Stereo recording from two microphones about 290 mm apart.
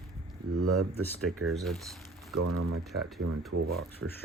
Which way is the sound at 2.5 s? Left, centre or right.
Right.